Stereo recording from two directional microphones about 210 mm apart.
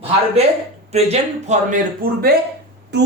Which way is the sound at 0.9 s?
30° right (ahead or behind).